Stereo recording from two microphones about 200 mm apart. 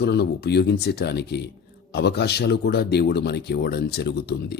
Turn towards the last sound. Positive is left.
turn(degrees=55)  # may be behind; listen again after turning